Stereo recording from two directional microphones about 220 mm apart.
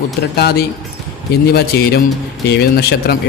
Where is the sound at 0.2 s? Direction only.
45° left (ahead or behind).